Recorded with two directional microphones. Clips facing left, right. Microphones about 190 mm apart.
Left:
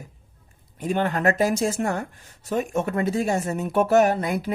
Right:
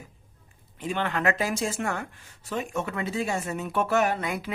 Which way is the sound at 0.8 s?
45° left (ahead or behind).